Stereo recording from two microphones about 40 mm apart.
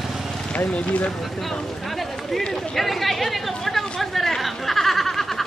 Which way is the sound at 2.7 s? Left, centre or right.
Centre.